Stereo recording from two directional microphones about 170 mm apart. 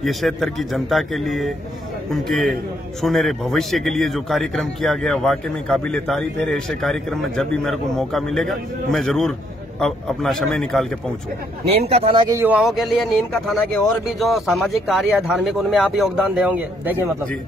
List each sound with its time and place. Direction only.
0.0 s a man's voice: centre (ahead or behind)
11.7 s speech: 35° right (ahead or behind)
12.3 s a man's voice: 10° right (ahead or behind)